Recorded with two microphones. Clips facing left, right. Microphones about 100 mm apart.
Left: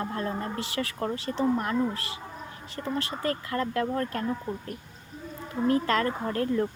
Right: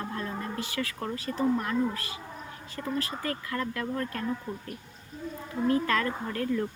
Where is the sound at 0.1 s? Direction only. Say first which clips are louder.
Left 3 dB; 35° left (ahead or behind).